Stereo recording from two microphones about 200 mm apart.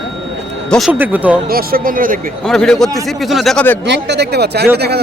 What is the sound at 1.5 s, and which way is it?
Speech, 45° right (ahead or behind).